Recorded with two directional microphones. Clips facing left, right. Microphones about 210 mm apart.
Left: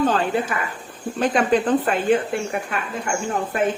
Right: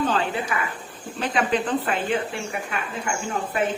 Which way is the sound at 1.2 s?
45° left (ahead or behind).